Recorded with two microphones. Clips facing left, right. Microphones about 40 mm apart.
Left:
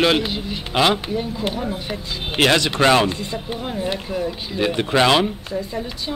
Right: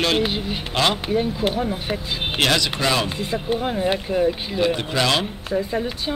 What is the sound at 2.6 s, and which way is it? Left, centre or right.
Speech, left.